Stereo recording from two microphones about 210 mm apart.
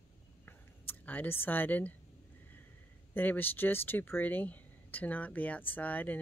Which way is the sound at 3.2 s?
10° left (ahead or behind).